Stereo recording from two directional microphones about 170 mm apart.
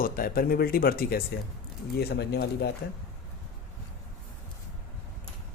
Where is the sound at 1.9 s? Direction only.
75° left (ahead or behind).